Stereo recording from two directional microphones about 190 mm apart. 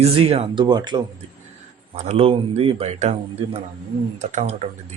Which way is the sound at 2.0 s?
35° right (ahead or behind).